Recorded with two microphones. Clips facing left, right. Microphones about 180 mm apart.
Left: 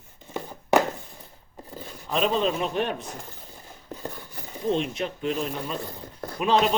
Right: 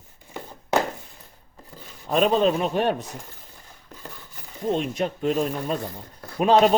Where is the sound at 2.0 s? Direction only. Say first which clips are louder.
Right 4 dB; 45° right (ahead or behind).